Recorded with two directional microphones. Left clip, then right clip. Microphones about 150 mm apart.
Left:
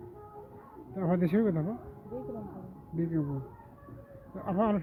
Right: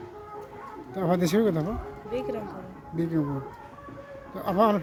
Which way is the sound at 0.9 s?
20° right (ahead or behind).